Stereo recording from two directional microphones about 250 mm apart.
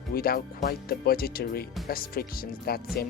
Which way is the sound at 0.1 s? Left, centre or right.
Left.